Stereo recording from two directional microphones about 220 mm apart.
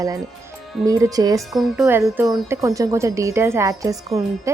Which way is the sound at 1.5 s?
Centre (ahead or behind).